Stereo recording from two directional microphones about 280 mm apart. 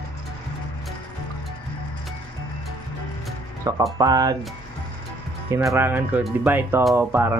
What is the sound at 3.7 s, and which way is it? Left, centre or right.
Speech, centre.